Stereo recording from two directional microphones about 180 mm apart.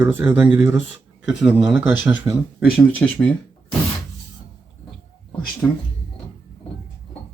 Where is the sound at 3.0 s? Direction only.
5° left (ahead or behind).